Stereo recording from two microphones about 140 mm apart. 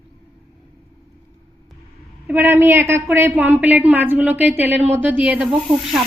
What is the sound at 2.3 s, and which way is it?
A woman's voice, 15° right (ahead or behind).